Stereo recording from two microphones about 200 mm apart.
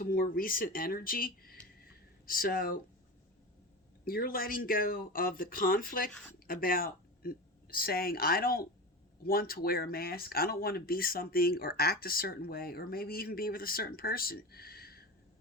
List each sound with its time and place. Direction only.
0.0 s speech: 45° left (ahead or behind)
4.0 s speech: 45° left (ahead or behind)
6.1 s speech: 5° left (ahead or behind)
6.5 s speech: 45° left (ahead or behind)